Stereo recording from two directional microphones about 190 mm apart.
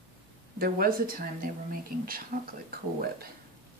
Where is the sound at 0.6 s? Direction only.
50° right (ahead or behind).